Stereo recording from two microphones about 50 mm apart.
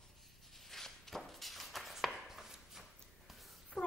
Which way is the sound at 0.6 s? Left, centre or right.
Centre.